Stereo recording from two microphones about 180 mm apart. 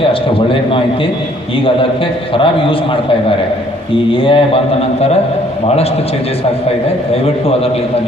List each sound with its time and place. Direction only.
0.0 s a man's voice: 30° left (ahead or behind)
2.3 s a man's voice: 30° left (ahead or behind)
7.1 s a man's voice: 35° left (ahead or behind)